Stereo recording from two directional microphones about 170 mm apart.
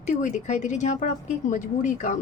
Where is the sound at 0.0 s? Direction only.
45° left (ahead or behind).